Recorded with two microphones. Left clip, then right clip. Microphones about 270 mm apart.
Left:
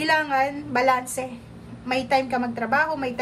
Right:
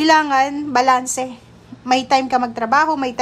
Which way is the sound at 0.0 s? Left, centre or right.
Centre.